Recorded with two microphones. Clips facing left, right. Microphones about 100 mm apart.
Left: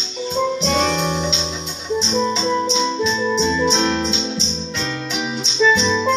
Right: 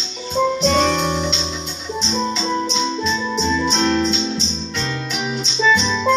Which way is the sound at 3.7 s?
15° left (ahead or behind).